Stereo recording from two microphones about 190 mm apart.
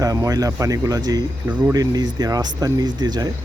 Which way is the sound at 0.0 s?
20° right (ahead or behind).